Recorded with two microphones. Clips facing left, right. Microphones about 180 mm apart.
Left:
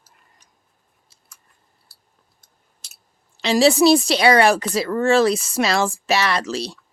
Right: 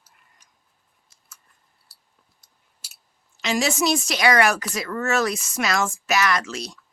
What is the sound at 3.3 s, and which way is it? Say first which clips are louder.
Speech: left 8 dB; 30° left (ahead or behind).